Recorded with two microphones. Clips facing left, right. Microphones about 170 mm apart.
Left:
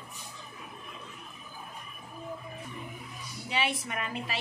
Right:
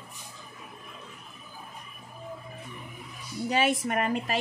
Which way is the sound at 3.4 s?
45° right (ahead or behind).